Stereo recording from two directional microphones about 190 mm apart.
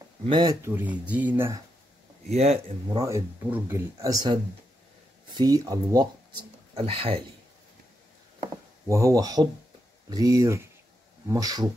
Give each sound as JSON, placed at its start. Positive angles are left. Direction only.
{"t": 0.3, "sound": "speech", "side_deg": -20}
{"t": 0.7, "sound": "speech", "side_deg": -10}
{"t": 2.2, "sound": "speech", "side_deg": -35}
{"t": 2.9, "sound": "speech", "side_deg": -20}
{"t": 6.7, "sound": "speech", "side_deg": -30}
{"t": 8.8, "sound": "speech", "side_deg": -15}